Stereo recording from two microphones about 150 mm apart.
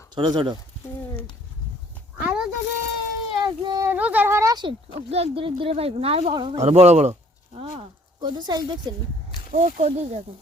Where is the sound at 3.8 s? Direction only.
10° right (ahead or behind).